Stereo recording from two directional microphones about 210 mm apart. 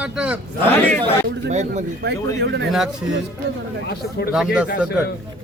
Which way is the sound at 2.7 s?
Centre (ahead or behind).